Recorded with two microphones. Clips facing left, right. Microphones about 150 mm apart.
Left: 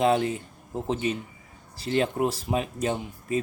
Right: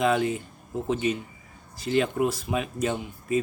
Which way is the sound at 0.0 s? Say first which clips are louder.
Left 1 dB; 35° left (ahead or behind).